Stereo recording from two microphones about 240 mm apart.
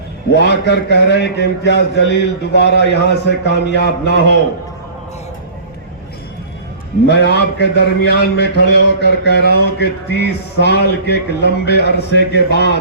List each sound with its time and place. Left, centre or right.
0.3 s a man's voice: left
7.1 s a man's voice: left